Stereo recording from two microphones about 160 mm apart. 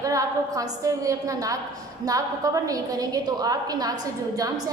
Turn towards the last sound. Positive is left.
turn(degrees=-25)  # may be behind; listen again after turning